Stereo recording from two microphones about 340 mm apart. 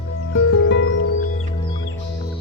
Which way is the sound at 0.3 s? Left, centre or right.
Left.